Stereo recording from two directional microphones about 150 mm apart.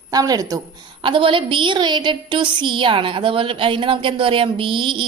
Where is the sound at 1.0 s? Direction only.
35° right (ahead or behind).